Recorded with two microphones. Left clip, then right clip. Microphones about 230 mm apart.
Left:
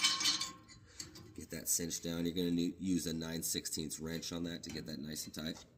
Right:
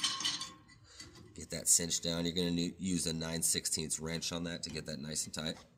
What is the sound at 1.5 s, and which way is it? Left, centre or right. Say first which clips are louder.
Speech: right 6 dB; right.